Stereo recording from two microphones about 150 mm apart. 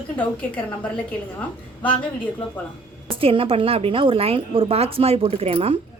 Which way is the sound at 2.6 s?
10° left (ahead or behind).